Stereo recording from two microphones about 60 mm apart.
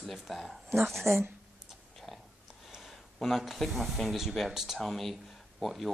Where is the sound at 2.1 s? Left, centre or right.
Centre.